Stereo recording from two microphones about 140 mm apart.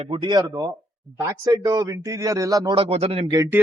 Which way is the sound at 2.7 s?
45° right (ahead or behind).